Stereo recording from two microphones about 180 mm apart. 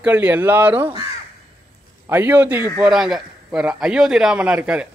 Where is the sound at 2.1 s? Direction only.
10° right (ahead or behind).